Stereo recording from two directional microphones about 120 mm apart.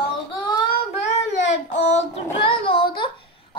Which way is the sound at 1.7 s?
70° left (ahead or behind).